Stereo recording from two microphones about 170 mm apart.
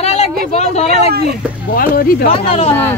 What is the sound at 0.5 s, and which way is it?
Speech, 40° left (ahead or behind).